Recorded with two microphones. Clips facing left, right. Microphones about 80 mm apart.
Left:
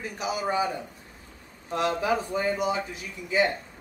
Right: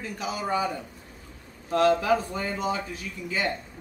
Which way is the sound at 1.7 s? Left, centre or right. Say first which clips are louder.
Right 4 dB; centre.